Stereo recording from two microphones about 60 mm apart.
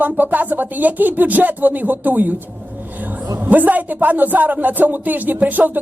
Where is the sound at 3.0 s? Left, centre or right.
Right.